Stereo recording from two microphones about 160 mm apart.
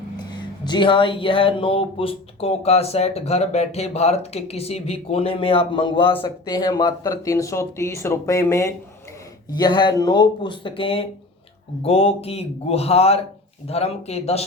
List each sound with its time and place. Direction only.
0.2 s speech: 25° left (ahead or behind)